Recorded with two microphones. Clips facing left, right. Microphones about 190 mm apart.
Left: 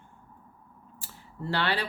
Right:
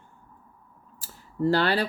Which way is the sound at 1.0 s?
40° right (ahead or behind).